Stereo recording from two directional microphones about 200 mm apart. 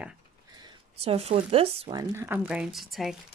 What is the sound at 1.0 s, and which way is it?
Speech, 30° right (ahead or behind).